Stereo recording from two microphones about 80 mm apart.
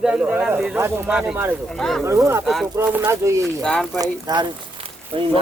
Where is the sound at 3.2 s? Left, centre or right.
Right.